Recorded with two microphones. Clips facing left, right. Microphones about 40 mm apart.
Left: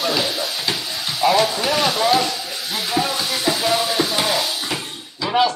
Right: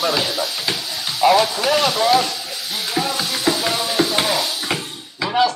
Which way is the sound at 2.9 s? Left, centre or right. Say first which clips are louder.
Left 1 dB; centre.